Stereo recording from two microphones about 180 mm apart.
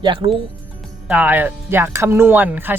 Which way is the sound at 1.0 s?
10° right (ahead or behind).